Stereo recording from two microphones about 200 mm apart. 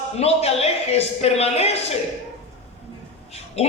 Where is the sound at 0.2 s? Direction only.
30° left (ahead or behind).